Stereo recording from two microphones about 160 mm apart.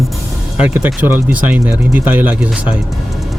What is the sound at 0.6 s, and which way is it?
Speech, 10° right (ahead or behind).